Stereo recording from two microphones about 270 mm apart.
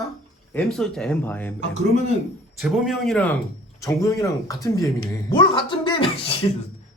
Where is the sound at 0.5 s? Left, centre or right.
Centre.